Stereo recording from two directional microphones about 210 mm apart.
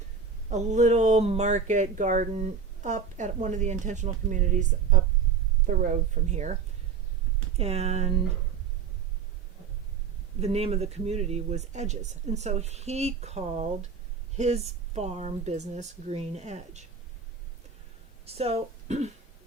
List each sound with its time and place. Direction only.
0.5 s speech: 35° right (ahead or behind)
7.5 s speech: 30° right (ahead or behind)
10.4 s speech: 30° right (ahead or behind)
18.3 s speech: 30° right (ahead or behind)